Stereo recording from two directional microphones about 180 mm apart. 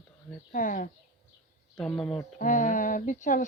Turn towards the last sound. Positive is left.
turn(degrees=45)  # may be behind; listen again after turning